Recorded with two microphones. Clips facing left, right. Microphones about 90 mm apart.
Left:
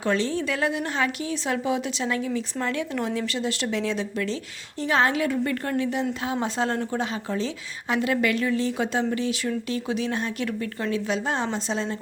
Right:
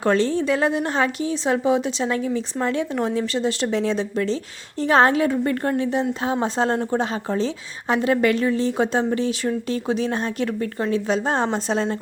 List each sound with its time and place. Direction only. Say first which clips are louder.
0.0 s a woman's voice: right 5 dB; 40° right (ahead or behind)
11.4 s a woman's voice: right 5 dB; 50° right (ahead or behind)